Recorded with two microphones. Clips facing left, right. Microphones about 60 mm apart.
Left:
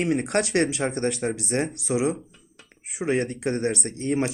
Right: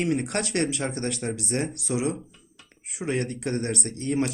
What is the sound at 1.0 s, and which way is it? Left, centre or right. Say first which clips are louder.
Speech: left 4 dB; centre.